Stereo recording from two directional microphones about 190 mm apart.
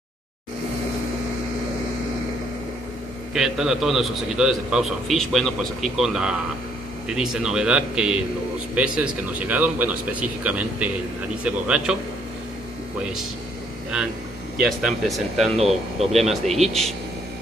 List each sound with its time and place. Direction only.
3.3 s a man's voice: 5° right (ahead or behind)
14.6 s a man's voice: centre (ahead or behind)
15.5 s speech: 35° right (ahead or behind)
16.1 s a man's voice: centre (ahead or behind)